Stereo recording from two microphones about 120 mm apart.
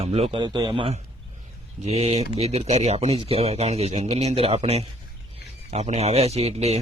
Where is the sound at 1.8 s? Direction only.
60° right (ahead or behind).